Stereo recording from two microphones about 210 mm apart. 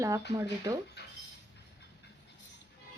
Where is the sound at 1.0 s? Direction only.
55° left (ahead or behind).